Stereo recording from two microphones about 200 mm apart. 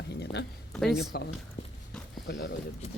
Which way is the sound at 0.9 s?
55° left (ahead or behind).